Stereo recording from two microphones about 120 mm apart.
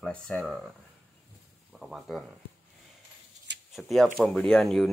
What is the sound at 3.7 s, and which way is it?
Speech, centre (ahead or behind).